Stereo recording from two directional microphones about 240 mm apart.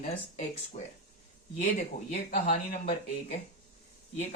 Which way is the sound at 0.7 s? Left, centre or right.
Left.